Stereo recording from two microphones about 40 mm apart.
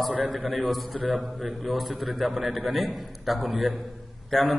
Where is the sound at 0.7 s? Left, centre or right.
Centre.